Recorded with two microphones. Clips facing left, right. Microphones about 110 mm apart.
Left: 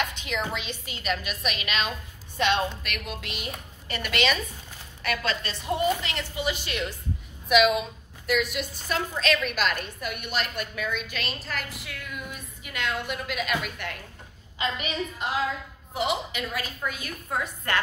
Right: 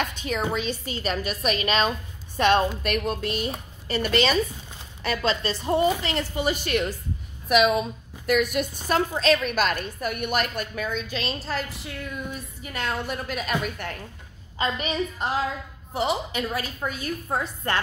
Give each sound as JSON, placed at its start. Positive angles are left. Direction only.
{"t": 0.1, "sound": "a woman's voice", "side_deg": -40}
{"t": 6.0, "sound": "a woman's voice", "side_deg": -45}